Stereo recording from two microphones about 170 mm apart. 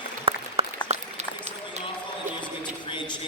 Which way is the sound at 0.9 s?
40° right (ahead or behind).